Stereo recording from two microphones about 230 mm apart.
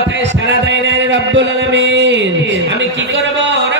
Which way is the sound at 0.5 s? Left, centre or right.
Right.